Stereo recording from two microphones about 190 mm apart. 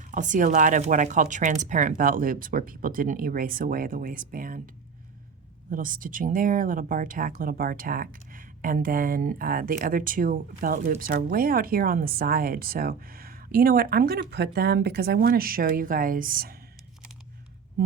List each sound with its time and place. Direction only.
0.1 s speech: 45° right (ahead or behind)
5.7 s speech: 45° right (ahead or behind)